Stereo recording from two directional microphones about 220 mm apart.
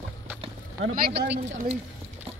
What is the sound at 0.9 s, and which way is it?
Speech, 50° right (ahead or behind).